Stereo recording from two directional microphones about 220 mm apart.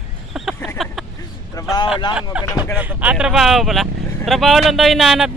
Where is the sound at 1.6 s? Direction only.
15° left (ahead or behind).